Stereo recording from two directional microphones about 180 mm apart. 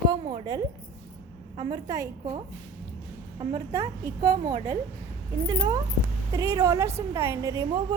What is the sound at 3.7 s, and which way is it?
A woman's voice, 20° right (ahead or behind).